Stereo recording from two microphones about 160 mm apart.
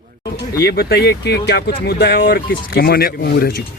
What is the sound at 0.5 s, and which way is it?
Speech, 75° left (ahead or behind).